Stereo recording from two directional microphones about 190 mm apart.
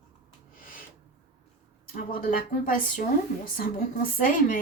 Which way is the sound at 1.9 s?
50° left (ahead or behind).